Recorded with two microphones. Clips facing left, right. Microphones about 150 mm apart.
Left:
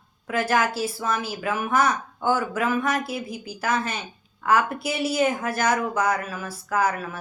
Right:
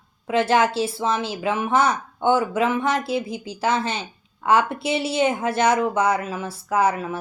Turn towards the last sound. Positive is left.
turn(degrees=-25)  # may be behind; listen again after turning